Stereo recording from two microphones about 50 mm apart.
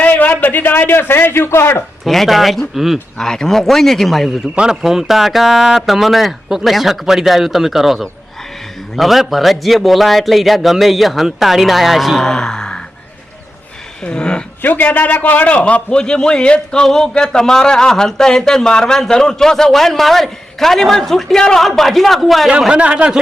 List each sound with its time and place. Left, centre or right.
0.0 s a man's voice: left
2.0 s a man's voice: centre
3.2 s speech: centre
4.5 s a man's voice: centre
14.0 s speech: centre
14.6 s a man's voice: left
15.9 s a man's voice: centre
22.7 s speech: right